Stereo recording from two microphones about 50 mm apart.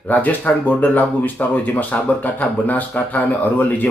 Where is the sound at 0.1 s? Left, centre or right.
Left.